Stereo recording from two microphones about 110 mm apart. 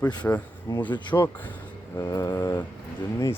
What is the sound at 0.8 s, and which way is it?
Speech, 45° left (ahead or behind).